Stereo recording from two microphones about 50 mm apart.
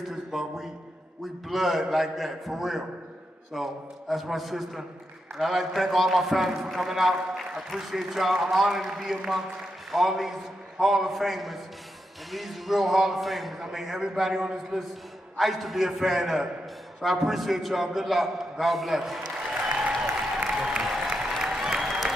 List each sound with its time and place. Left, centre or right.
0.0 s a man's voice: centre
19.3 s applause: centre